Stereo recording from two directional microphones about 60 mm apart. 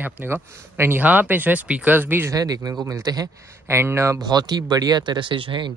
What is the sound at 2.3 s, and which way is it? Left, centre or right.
Speech, right.